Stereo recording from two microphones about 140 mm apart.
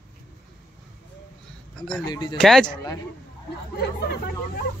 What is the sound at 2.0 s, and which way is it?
Speech, 30° left (ahead or behind).